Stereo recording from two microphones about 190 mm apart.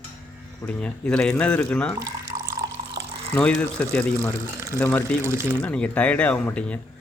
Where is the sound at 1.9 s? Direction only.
15° right (ahead or behind).